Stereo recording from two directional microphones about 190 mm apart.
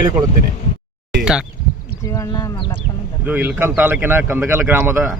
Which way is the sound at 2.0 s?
15° left (ahead or behind).